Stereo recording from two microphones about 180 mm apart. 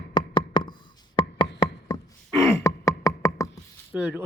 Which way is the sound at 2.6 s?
20° left (ahead or behind).